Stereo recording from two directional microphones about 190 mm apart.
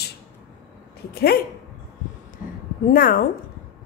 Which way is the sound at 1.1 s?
55° left (ahead or behind).